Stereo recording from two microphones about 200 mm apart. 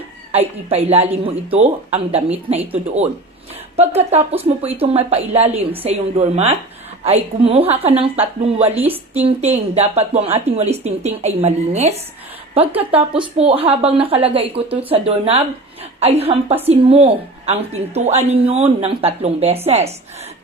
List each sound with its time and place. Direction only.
0.3 s a woman's voice: 30° right (ahead or behind)
3.8 s a woman's voice: 30° right (ahead or behind)
13.0 s a woman's voice: 30° right (ahead or behind)